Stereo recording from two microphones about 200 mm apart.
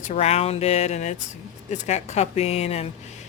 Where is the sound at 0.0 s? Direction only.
35° left (ahead or behind).